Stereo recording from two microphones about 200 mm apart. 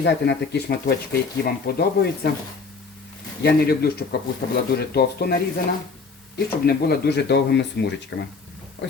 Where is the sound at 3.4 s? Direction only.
50° left (ahead or behind).